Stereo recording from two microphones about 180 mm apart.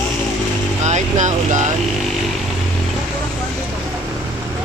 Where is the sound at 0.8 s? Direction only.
40° right (ahead or behind).